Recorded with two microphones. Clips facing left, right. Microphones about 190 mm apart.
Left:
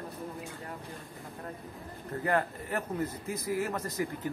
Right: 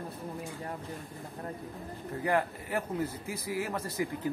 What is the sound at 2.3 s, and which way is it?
A man's voice, 10° right (ahead or behind).